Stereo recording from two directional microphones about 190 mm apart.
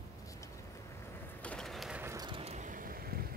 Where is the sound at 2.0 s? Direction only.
20° right (ahead or behind).